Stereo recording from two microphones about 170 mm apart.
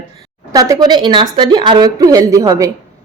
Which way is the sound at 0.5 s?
20° right (ahead or behind).